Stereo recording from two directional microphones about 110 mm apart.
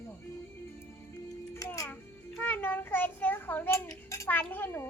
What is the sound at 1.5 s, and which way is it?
Music, 30° left (ahead or behind).